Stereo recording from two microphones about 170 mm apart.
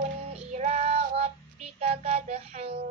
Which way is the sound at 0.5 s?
40° right (ahead or behind).